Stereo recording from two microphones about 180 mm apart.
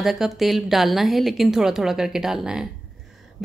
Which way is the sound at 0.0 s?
Centre (ahead or behind).